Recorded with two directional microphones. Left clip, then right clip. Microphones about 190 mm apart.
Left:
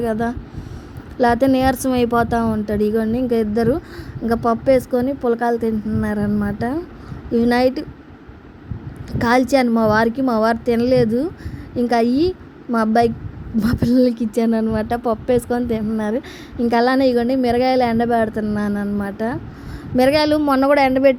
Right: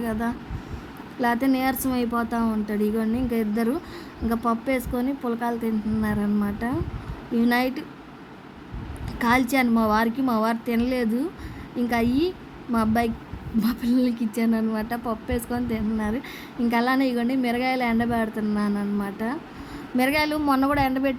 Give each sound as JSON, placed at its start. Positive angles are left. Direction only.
{"t": 0.0, "sound": "a woman's voice", "side_deg": 20}
{"t": 9.1, "sound": "a woman's voice", "side_deg": 20}